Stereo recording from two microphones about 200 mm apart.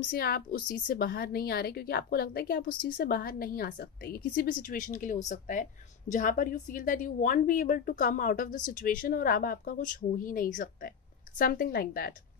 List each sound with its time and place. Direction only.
0.1 s a woman's voice: 50° left (ahead or behind)